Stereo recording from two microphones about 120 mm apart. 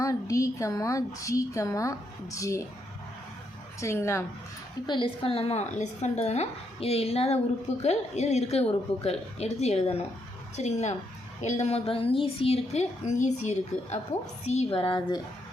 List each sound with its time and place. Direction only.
0.0 s a woman's voice: 25° left (ahead or behind)
3.8 s a woman's voice: 25° left (ahead or behind)
4.9 s a woman's voice: 45° left (ahead or behind)
10.5 s a woman's voice: 70° left (ahead or behind)
14.7 s a woman's voice: 45° left (ahead or behind)